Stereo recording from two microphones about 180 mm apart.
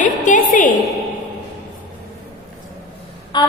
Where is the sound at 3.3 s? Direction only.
25° left (ahead or behind).